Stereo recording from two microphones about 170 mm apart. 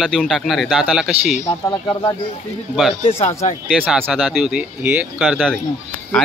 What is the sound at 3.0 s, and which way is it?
Speech, 35° left (ahead or behind).